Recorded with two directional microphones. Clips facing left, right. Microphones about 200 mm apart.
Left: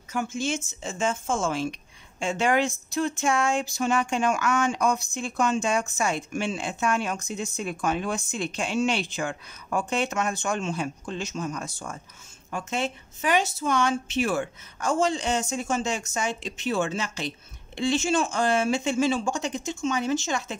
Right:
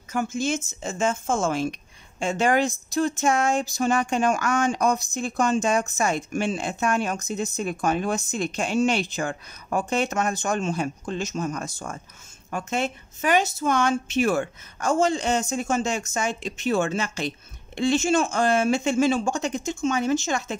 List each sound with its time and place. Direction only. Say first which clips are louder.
0.1 s a woman's voice: right 3 dB; 40° right (ahead or behind)